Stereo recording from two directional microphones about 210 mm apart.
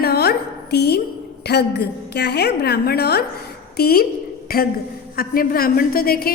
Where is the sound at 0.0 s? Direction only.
50° left (ahead or behind).